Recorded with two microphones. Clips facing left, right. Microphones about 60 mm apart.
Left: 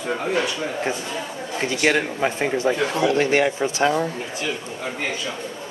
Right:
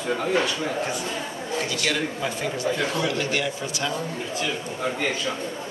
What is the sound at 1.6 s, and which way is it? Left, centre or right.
Speech, left.